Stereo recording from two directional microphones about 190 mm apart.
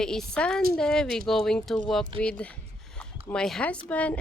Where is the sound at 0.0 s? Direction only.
5° left (ahead or behind).